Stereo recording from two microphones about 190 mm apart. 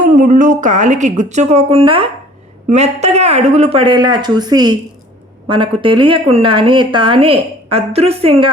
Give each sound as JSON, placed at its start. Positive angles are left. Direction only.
{"t": 0.0, "sound": "speech", "side_deg": -45}